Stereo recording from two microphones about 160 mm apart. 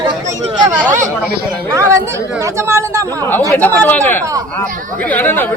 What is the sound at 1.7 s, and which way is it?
Speech, 20° right (ahead or behind).